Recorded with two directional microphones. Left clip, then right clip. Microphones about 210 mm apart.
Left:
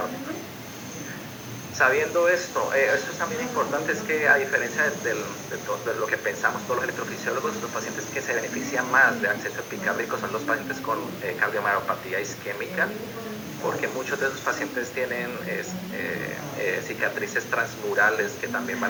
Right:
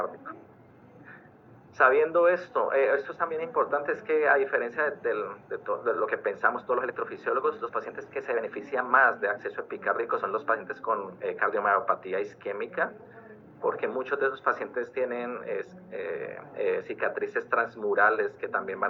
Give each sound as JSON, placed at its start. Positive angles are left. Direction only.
{"t": 1.8, "sound": "a man's voice", "side_deg": -35}